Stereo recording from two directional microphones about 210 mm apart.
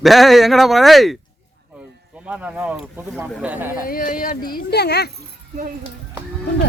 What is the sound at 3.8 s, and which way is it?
Speech, 40° left (ahead or behind).